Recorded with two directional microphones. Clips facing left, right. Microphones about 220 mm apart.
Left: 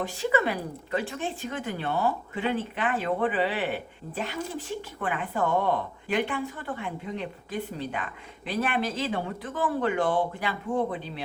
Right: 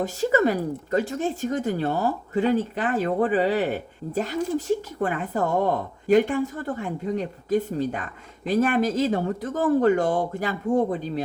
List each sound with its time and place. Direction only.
0.0 s speech: 40° right (ahead or behind)